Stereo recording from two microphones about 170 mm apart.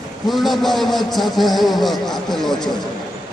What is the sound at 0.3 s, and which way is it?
A man's voice, centre (ahead or behind).